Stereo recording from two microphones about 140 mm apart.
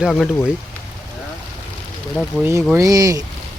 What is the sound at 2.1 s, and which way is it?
Speech, 5° left (ahead or behind).